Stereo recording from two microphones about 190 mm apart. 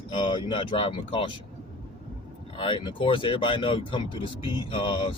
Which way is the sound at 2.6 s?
25° left (ahead or behind).